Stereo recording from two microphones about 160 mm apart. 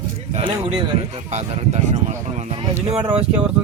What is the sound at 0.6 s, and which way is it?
Speech, 35° right (ahead or behind).